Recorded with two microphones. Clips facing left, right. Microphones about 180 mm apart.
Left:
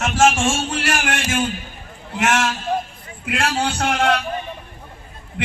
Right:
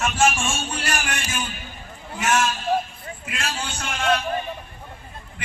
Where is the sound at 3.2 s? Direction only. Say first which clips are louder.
Left 10 dB; 65° left (ahead or behind).